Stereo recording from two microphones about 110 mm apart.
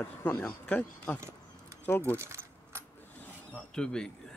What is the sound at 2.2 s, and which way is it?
Keys jangling, 25° right (ahead or behind).